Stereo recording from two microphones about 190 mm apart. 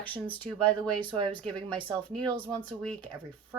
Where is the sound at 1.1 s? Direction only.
25° right (ahead or behind).